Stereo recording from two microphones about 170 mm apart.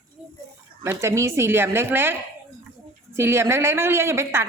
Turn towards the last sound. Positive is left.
turn(degrees=-15)  # may be behind; listen again after turning